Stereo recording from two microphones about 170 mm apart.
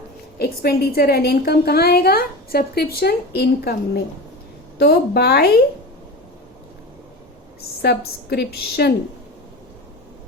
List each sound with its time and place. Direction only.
0.3 s a woman's voice: 65° left (ahead or behind)
7.8 s a woman's voice: 70° left (ahead or behind)